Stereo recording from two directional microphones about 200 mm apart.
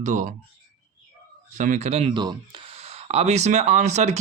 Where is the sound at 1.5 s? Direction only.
40° right (ahead or behind).